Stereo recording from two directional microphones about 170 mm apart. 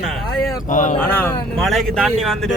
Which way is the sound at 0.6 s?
50° left (ahead or behind).